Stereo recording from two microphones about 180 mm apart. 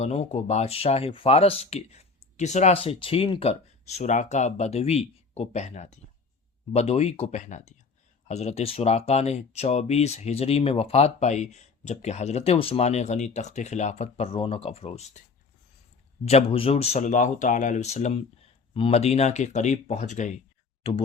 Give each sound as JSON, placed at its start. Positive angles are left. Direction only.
{"t": 0.0, "sound": "speech", "side_deg": 35}
{"t": 16.2, "sound": "speech", "side_deg": 35}